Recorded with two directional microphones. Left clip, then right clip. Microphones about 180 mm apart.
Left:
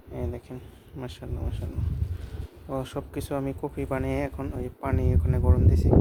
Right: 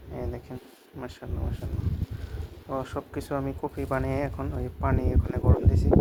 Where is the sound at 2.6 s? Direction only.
20° left (ahead or behind).